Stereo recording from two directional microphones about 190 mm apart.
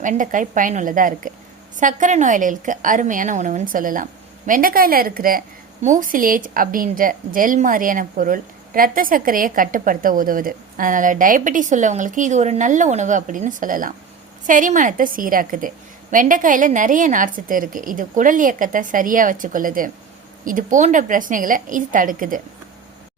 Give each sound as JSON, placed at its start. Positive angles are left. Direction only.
{"t": 0.0, "sound": "a woman's voice", "side_deg": -40}